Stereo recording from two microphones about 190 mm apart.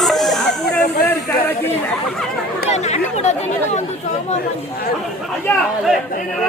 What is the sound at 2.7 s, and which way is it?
Chatter, 35° left (ahead or behind).